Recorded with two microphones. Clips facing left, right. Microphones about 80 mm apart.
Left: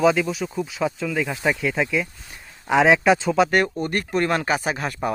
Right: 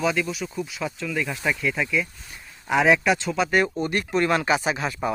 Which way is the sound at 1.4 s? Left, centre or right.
Left.